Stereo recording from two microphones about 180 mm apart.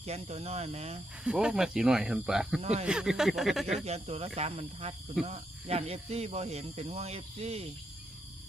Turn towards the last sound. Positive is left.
turn(degrees=-35)  # may be behind; listen again after turning